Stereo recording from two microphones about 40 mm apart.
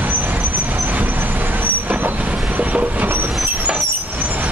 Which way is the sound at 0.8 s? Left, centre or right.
Right.